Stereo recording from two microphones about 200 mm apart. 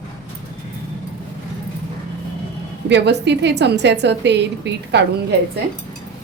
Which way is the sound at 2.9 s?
60° right (ahead or behind).